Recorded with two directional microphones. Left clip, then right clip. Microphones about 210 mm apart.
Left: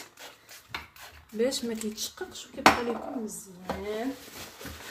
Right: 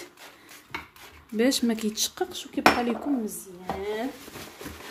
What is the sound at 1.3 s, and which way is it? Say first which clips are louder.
Speech: right 4 dB; 45° right (ahead or behind).